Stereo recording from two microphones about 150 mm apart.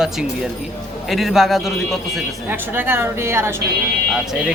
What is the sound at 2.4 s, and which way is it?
Speech, 15° right (ahead or behind).